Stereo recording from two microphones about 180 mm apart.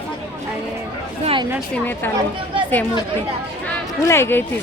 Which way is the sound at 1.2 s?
30° right (ahead or behind).